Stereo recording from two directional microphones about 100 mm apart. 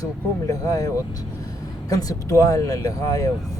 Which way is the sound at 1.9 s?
35° left (ahead or behind).